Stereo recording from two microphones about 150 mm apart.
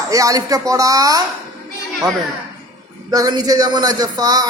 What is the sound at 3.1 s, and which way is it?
Speech, 25° right (ahead or behind).